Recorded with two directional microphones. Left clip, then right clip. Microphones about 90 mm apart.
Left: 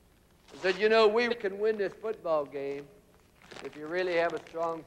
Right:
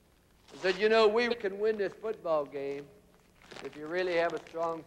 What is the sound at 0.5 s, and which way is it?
A man's voice, 35° right (ahead or behind).